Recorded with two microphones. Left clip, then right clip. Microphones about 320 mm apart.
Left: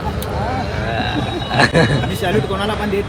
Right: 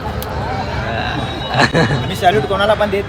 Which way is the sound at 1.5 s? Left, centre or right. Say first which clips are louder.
Even; centre.